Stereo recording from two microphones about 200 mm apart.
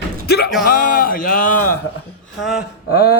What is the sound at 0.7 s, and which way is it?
Speech, 45° left (ahead or behind).